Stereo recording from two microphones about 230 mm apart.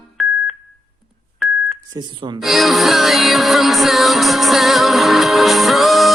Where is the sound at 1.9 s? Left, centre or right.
Centre.